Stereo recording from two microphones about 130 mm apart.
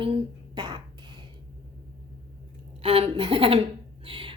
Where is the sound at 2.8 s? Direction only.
45° right (ahead or behind).